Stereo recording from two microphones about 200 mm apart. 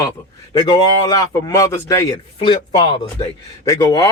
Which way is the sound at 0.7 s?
20° left (ahead or behind).